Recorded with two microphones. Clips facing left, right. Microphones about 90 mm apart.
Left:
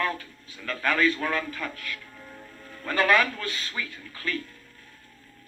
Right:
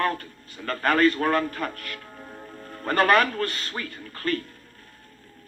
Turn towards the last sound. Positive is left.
turn(degrees=-50)  # may be behind; listen again after turning